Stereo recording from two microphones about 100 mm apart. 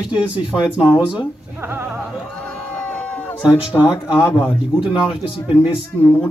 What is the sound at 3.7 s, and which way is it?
Speech, 10° right (ahead or behind).